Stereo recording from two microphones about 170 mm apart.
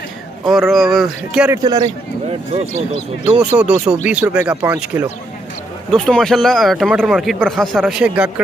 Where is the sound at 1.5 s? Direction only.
25° right (ahead or behind).